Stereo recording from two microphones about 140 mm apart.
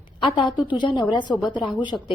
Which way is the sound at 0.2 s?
35° left (ahead or behind).